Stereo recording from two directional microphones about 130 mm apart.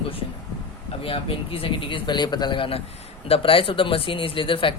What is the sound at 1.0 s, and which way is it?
Speech, 45° left (ahead or behind).